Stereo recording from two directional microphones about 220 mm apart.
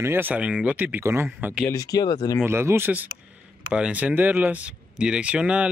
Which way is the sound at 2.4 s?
10° right (ahead or behind).